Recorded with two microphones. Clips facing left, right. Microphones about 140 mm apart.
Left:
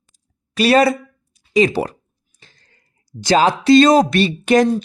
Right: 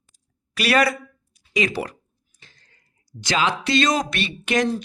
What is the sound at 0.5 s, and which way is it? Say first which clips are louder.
A woman's voice: left 7 dB; 25° left (ahead or behind).